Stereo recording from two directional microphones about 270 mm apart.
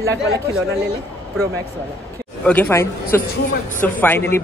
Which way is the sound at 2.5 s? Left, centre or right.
Centre.